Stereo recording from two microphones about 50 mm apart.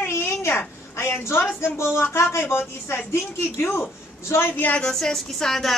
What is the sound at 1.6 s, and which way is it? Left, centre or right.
Speech, left.